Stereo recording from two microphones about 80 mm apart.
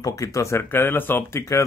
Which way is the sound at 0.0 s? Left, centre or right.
Left.